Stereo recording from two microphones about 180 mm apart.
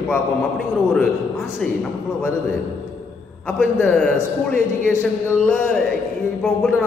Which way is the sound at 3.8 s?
5° left (ahead or behind).